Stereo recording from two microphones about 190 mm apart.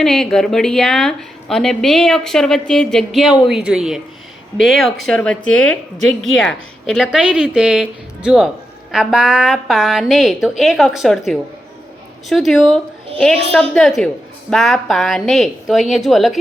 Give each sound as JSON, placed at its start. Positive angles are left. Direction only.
{"t": 0.0, "sound": "a woman's voice", "side_deg": 0}